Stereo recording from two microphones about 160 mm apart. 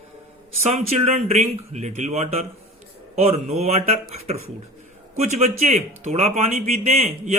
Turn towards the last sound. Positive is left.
turn(degrees=-45)  # may be behind; listen again after turning